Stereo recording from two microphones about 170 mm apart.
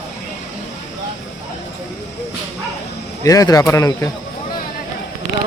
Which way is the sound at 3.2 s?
20° left (ahead or behind).